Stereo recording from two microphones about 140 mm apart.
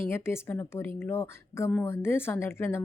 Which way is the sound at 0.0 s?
20° left (ahead or behind).